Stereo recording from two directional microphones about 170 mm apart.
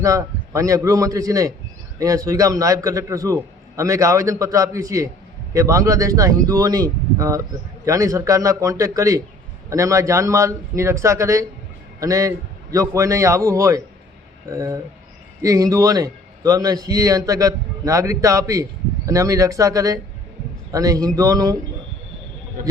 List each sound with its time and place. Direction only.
0.0 s a man's voice: 20° right (ahead or behind)